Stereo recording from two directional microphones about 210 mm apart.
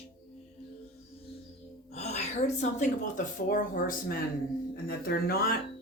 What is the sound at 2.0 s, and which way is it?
Speech, 30° left (ahead or behind).